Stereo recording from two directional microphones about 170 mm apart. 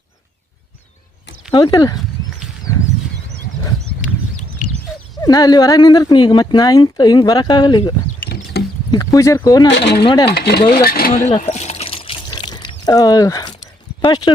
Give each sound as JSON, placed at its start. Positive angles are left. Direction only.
{"t": 1.5, "sound": "speech", "side_deg": 25}
{"t": 5.2, "sound": "speech", "side_deg": 20}
{"t": 8.2, "sound": "a sound", "side_deg": 65}
{"t": 8.9, "sound": "speech", "side_deg": 20}
{"t": 9.6, "sound": "speech", "side_deg": 85}
{"t": 10.0, "sound": "speech", "side_deg": 30}
{"t": 10.2, "sound": "speech", "side_deg": 75}
{"t": 10.8, "sound": "speech", "side_deg": 65}
{"t": 11.1, "sound": "pour", "side_deg": 45}
{"t": 14.0, "sound": "speech", "side_deg": 25}